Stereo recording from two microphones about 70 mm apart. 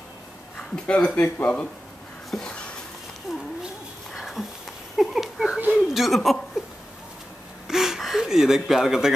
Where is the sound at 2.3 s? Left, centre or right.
Centre.